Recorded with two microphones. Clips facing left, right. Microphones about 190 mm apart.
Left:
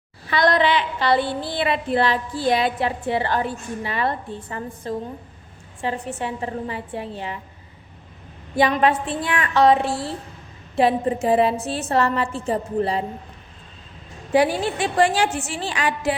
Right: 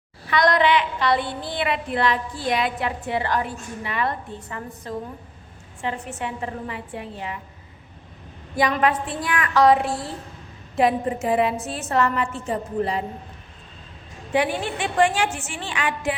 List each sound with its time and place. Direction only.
0.3 s a woman's voice: 30° left (ahead or behind)
8.5 s a woman's voice: 30° left (ahead or behind)
14.3 s a woman's voice: 35° left (ahead or behind)